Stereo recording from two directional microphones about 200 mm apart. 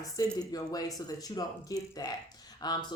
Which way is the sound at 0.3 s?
20° left (ahead or behind).